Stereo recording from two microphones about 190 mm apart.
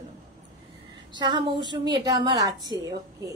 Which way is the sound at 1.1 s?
25° right (ahead or behind).